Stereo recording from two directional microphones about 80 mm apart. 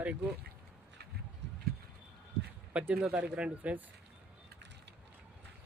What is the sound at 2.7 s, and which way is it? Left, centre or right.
Speech, centre.